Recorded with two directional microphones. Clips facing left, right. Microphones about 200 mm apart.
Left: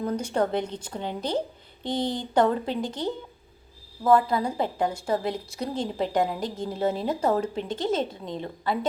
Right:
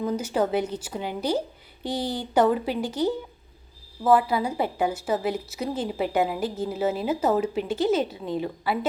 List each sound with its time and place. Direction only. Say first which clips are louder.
0.0 s a woman's voice: right 1 dB; 5° right (ahead or behind)